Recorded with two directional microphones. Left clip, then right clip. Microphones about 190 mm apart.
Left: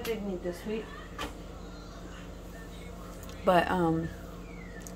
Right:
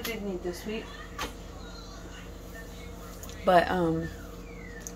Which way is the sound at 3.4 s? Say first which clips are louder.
Right 2 dB; 10° left (ahead or behind).